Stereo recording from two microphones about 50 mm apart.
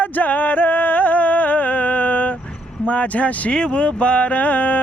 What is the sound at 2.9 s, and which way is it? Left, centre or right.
Speech, left.